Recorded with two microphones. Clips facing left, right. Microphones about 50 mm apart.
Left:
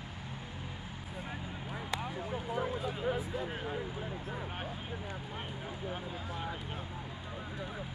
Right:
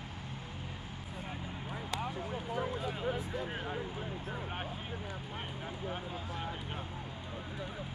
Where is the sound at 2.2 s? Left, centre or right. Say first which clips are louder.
Left 1 dB; centre.